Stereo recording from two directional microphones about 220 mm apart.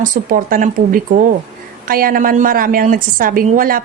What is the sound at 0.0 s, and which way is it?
A woman's voice, 35° right (ahead or behind).